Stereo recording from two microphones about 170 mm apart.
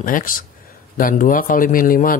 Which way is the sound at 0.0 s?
55° left (ahead or behind).